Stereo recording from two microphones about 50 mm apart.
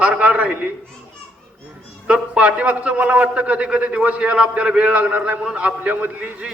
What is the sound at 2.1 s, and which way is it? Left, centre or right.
A man's voice, right.